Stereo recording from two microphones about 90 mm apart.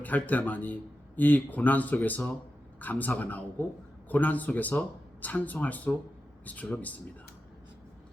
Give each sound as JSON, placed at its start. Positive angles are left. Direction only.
{"t": 0.0, "sound": "speech", "side_deg": 20}